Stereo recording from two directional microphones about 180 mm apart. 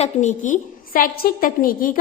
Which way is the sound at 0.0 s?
40° left (ahead or behind).